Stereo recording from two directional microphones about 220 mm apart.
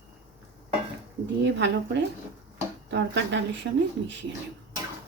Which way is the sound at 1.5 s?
55° right (ahead or behind).